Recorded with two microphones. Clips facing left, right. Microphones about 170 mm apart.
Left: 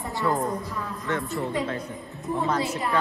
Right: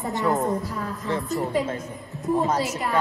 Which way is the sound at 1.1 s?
40° right (ahead or behind).